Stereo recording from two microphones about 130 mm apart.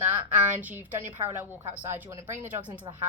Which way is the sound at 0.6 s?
15° right (ahead or behind).